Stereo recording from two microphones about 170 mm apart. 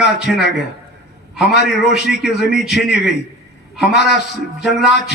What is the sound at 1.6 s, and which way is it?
Speech, 80° left.